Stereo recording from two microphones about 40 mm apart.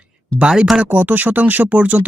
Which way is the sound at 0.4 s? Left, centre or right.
Right.